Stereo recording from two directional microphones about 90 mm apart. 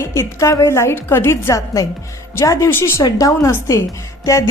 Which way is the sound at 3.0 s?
40° left (ahead or behind).